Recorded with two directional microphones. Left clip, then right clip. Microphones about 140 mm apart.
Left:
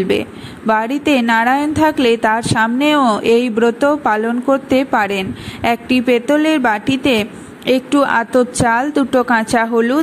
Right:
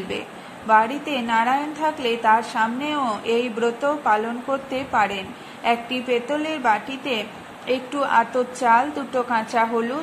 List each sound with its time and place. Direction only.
0.7 s a woman's voice: 45° left (ahead or behind)